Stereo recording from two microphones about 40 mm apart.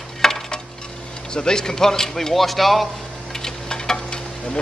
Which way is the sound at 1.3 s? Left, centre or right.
Centre.